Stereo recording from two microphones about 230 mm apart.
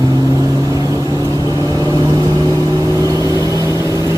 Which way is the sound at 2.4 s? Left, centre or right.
Centre.